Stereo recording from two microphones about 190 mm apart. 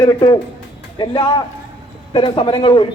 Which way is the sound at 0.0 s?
20° left (ahead or behind).